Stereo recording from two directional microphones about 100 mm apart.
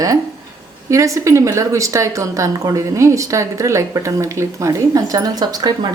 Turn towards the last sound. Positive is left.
turn(degrees=-40)  # may be behind; listen again after turning